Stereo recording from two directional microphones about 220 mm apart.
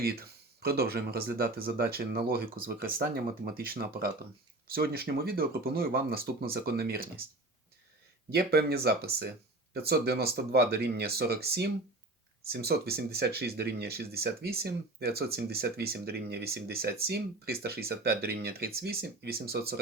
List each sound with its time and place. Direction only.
0.0 s speech: 45° right (ahead or behind)
8.3 s speech: 45° right (ahead or behind)